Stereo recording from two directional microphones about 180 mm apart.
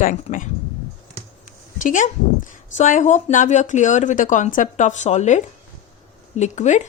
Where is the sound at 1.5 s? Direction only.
45° left (ahead or behind).